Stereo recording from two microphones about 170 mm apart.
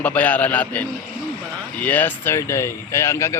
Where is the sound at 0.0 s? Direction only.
10° left (ahead or behind).